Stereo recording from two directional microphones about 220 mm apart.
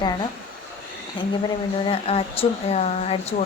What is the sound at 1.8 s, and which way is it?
A woman's voice, 25° left (ahead or behind).